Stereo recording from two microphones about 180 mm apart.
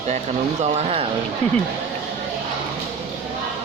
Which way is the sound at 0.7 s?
35° right (ahead or behind).